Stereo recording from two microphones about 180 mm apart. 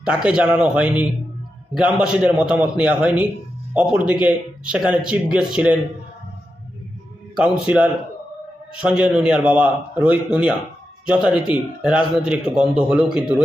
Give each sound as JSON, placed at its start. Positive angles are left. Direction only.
{"t": 0.0, "sound": "a man's voice", "side_deg": -5}
{"t": 7.3, "sound": "a man's voice", "side_deg": -5}